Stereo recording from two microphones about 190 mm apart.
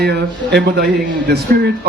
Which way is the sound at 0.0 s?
60° right (ahead or behind).